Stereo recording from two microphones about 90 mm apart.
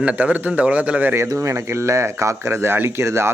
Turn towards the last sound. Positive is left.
turn(degrees=-30)  # may be behind; listen again after turning